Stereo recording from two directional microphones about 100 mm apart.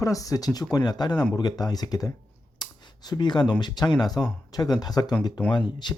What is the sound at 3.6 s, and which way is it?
Speech, 45° left (ahead or behind).